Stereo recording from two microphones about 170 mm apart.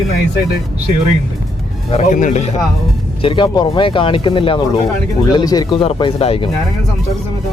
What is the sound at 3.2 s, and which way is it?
Speech, 30° left (ahead or behind).